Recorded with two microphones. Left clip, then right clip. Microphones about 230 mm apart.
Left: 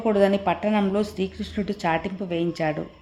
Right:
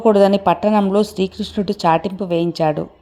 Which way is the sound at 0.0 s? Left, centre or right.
Right.